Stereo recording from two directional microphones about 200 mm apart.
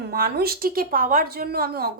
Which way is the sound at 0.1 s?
50° right (ahead or behind).